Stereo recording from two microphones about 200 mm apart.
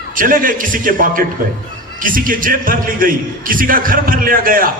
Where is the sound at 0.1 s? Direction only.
45° right (ahead or behind).